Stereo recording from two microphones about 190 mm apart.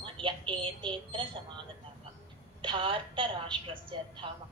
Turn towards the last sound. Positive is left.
turn(degrees=-25)  # may be behind; listen again after turning